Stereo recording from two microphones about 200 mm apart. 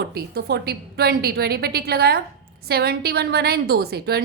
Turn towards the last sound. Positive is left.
turn(degrees=-55)  # may be behind; listen again after turning